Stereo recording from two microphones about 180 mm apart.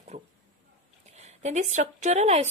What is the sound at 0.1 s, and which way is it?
A woman's voice, 35° right (ahead or behind).